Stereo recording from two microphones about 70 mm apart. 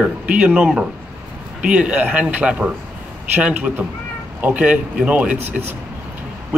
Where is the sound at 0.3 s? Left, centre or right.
Centre.